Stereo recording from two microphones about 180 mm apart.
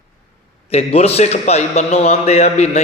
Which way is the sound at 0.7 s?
35° left (ahead or behind).